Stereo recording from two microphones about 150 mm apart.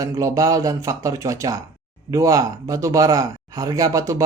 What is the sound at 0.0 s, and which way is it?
Speech, 20° right (ahead or behind).